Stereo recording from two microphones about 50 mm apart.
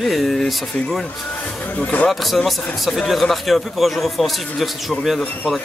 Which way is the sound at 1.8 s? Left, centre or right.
Left.